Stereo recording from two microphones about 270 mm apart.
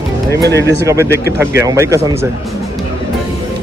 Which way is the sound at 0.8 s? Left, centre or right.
Centre.